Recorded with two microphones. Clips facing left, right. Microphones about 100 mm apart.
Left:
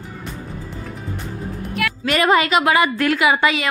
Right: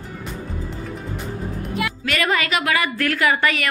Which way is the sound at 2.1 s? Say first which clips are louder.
Left 6 dB; 30° left (ahead or behind).